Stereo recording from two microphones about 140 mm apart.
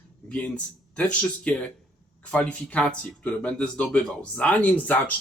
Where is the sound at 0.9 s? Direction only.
10° left (ahead or behind).